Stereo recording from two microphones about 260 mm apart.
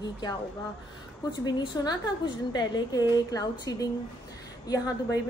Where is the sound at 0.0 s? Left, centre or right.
Centre.